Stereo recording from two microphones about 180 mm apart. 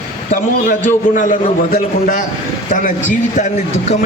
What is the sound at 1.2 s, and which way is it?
A man's voice, 45° left (ahead or behind).